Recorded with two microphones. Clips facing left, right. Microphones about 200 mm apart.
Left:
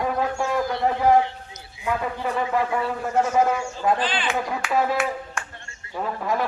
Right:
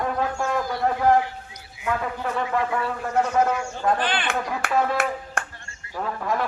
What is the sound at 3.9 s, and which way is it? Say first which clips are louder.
Speech: even; 60° right (ahead or behind).